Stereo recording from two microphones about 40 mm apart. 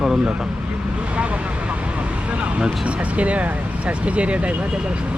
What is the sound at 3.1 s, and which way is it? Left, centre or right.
Speech, right.